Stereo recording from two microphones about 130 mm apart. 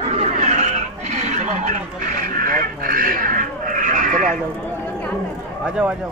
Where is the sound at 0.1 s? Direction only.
55° right (ahead or behind); by 4.3 s 90° right.